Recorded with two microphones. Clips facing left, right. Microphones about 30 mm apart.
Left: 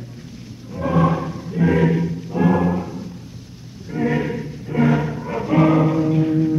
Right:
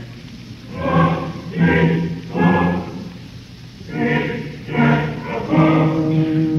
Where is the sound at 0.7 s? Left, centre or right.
Right.